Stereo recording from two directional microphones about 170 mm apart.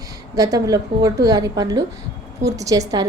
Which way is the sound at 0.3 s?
20° right (ahead or behind).